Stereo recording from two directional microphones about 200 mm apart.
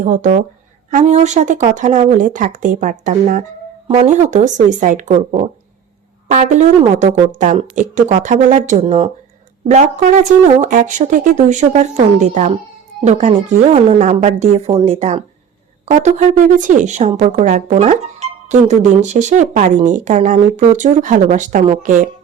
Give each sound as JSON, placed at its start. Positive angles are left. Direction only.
{"t": 0.0, "sound": "speech", "side_deg": -40}
{"t": 6.3, "sound": "speech", "side_deg": -35}